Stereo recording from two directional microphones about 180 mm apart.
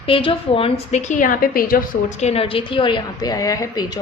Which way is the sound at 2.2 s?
35° left (ahead or behind).